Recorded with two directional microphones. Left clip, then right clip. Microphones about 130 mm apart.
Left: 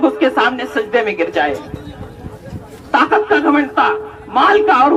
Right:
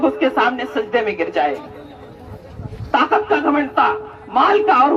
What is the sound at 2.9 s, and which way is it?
A man's voice, 30° right (ahead or behind).